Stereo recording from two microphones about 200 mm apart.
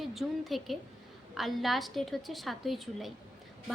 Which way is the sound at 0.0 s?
Centre (ahead or behind).